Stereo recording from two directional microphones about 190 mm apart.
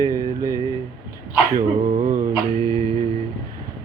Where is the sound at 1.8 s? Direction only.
35° right (ahead or behind).